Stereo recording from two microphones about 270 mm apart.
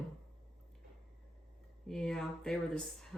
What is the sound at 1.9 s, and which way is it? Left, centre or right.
Speech, centre.